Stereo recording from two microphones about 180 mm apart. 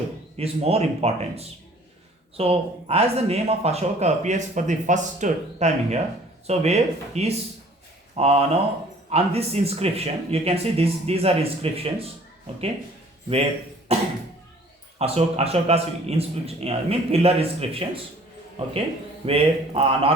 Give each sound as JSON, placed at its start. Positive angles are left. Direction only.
{"t": 0.3, "sound": "speech", "side_deg": -35}
{"t": 13.9, "sound": "speech", "side_deg": -35}